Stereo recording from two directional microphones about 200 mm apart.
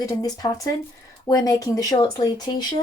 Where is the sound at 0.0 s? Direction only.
20° left (ahead or behind).